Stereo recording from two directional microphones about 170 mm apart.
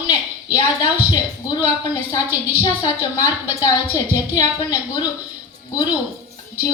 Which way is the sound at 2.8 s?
25° left (ahead or behind).